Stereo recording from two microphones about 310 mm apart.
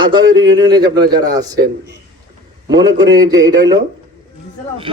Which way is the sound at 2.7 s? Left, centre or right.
Right.